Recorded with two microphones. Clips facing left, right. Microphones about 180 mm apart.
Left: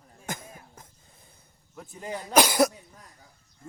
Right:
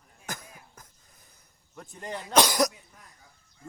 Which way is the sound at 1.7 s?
5° left (ahead or behind).